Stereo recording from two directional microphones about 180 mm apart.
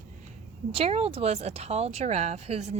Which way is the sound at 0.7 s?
35° right (ahead or behind).